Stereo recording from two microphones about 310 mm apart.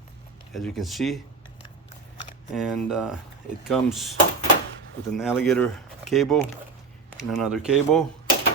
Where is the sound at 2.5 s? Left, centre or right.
Centre.